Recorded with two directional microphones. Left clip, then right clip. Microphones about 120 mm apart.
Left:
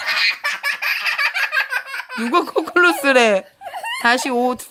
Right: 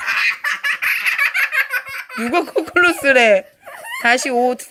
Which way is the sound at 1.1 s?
25° left (ahead or behind).